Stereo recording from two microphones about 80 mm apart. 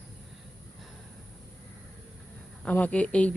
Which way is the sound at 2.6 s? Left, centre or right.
Centre.